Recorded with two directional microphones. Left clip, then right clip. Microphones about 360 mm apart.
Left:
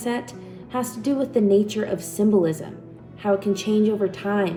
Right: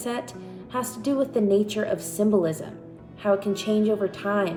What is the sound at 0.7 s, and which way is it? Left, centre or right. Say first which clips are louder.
A woman's voice: left 2 dB; centre.